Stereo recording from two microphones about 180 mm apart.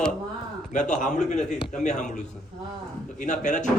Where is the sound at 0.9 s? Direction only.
40° left (ahead or behind).